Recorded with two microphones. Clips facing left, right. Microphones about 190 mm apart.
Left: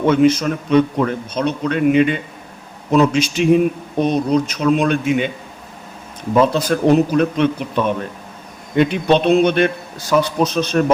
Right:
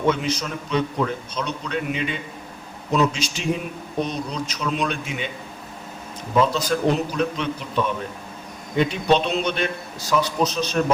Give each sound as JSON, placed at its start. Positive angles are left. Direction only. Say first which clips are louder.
{"t": 0.1, "sound": "a man's voice", "louder": "left 10 dB", "side_deg": 55}
{"t": 6.5, "sound": "a man's voice", "louder": "left 7 dB", "side_deg": 55}